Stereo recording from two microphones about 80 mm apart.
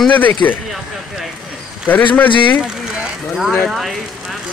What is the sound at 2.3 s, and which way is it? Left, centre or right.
Speech, left.